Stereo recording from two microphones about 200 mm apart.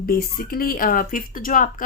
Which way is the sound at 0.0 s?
50° left (ahead or behind).